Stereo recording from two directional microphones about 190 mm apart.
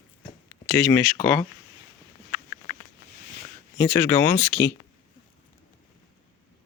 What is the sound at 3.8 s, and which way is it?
Speech, 10° left (ahead or behind).